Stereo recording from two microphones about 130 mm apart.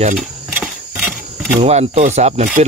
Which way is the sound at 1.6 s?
60° right (ahead or behind).